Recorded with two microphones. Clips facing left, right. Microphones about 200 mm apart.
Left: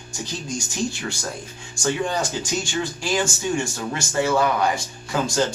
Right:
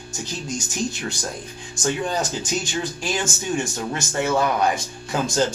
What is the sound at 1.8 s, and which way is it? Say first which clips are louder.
Speech: even; 20° right (ahead or behind).